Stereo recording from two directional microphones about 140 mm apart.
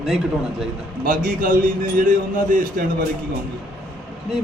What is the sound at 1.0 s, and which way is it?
A man's voice, 75° right (ahead or behind).